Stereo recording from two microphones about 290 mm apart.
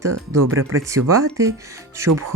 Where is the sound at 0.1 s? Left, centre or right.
Right.